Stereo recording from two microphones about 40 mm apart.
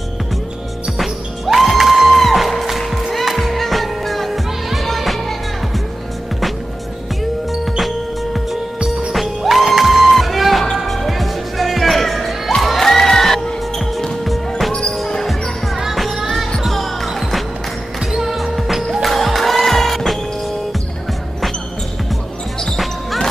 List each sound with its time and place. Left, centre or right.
0.9 s music: centre
7.8 s music: centre
12.6 s crowd: centre
13.7 s music: centre
14.7 s music: centre
15.7 s music: centre
16.6 s basketball bounce: centre
17.2 s music: centre
19.0 s music: centre